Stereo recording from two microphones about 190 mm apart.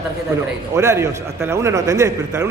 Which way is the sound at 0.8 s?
15° right (ahead or behind).